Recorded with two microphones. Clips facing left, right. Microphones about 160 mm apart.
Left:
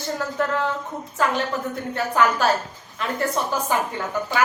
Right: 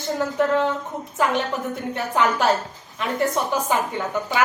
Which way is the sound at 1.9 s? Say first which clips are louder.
Left 1 dB; 20° right (ahead or behind).